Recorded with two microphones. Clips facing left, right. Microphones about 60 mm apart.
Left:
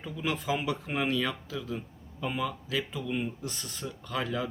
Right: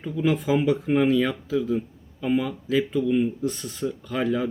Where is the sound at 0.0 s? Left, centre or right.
Centre.